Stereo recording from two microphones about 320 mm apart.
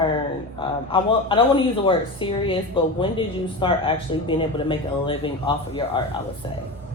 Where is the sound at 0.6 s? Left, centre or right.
Centre.